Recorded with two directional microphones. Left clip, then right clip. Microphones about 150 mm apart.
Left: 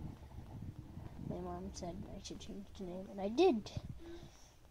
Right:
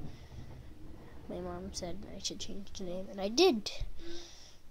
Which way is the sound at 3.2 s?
15° right (ahead or behind).